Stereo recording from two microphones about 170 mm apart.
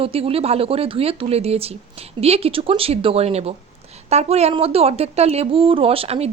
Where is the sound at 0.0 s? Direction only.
35° right (ahead or behind).